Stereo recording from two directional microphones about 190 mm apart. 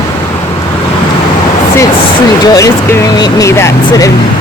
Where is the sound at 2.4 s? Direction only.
20° left (ahead or behind).